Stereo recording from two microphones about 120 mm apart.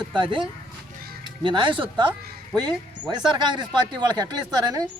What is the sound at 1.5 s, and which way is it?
Speech, 45° right (ahead or behind).